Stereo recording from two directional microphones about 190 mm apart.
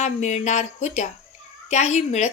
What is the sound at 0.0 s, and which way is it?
A woman's voice, 40° left (ahead or behind).